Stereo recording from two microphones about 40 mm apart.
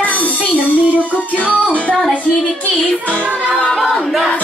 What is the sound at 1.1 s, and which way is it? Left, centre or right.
Music, left.